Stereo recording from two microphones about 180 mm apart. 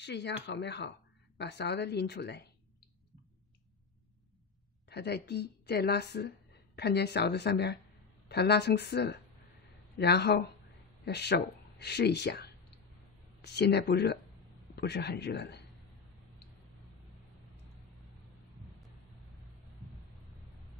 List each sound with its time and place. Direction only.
0.0 s speech: 75° left (ahead or behind)
4.8 s a woman's voice: 65° left (ahead or behind)